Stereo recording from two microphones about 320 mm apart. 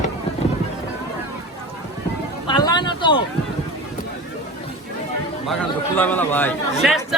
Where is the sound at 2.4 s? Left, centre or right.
Centre.